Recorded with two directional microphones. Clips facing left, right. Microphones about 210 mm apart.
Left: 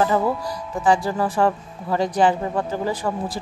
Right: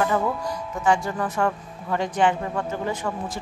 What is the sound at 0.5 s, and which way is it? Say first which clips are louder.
Speech: left 3 dB; 35° left (ahead or behind).